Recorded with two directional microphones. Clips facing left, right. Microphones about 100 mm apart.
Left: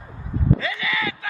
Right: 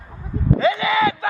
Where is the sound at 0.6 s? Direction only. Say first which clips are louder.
Right 9 dB; 25° right (ahead or behind).